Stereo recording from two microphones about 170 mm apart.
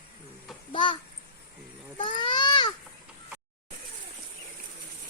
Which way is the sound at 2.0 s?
30° left (ahead or behind).